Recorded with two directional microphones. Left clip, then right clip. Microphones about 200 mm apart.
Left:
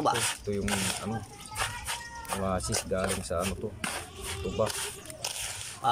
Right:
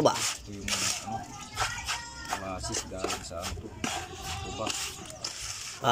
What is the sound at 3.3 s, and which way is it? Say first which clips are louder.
Speech: left 7 dB; 45° left (ahead or behind).